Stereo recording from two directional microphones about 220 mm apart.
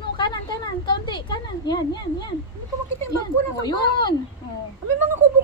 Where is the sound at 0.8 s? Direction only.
20° left (ahead or behind).